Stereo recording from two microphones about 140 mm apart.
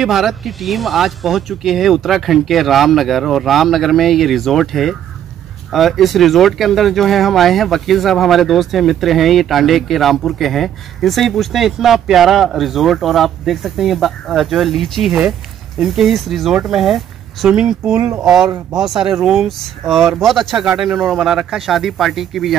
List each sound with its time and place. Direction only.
0.0 s speech: centre (ahead or behind)
17.9 s speech: 20° right (ahead or behind)
18.2 s speech: 5° right (ahead or behind)